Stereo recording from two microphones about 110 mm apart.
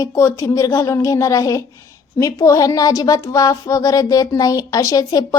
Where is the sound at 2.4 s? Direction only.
30° left (ahead or behind).